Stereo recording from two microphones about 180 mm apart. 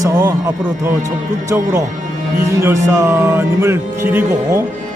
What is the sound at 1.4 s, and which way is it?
Speech, 15° right (ahead or behind).